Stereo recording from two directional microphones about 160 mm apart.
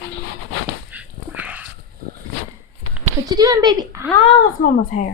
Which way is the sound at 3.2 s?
20° right (ahead or behind).